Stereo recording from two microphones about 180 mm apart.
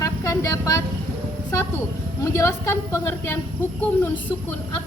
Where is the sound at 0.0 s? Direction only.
15° left (ahead or behind).